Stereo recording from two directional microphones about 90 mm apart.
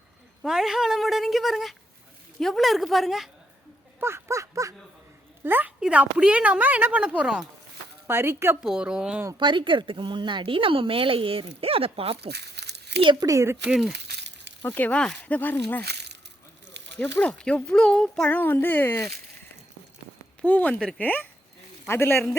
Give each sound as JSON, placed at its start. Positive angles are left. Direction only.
{"t": 0.4, "sound": "a woman's voice", "side_deg": -5}
{"t": 4.0, "sound": "a sound", "side_deg": -30}
{"t": 5.4, "sound": "a woman's voice", "side_deg": -20}
{"t": 8.0, "sound": "speech", "side_deg": -25}
{"t": 8.6, "sound": "a woman's voice", "side_deg": -10}
{"t": 9.4, "sound": "speech", "side_deg": -60}
{"t": 13.1, "sound": "a sound", "side_deg": -40}
{"t": 13.7, "sound": "a woman's voice", "side_deg": -5}
{"t": 14.6, "sound": "speech", "side_deg": 20}
{"t": 17.0, "sound": "speech", "side_deg": 15}
{"t": 18.3, "sound": "speech", "side_deg": 20}
{"t": 20.4, "sound": "speech", "side_deg": 15}